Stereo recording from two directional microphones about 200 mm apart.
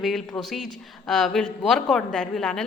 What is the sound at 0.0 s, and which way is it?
A woman's voice, centre (ahead or behind).